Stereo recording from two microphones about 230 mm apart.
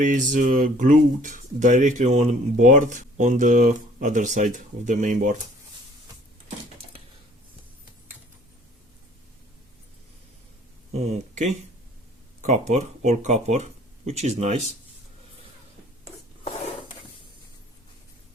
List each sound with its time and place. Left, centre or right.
0.0 s speech: right
10.9 s speech: right